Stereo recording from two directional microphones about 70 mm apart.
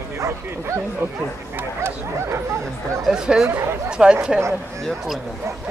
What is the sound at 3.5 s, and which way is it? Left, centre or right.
Speech, right.